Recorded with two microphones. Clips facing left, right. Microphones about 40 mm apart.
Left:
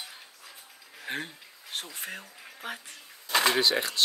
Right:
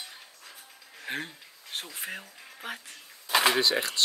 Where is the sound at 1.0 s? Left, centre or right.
Centre.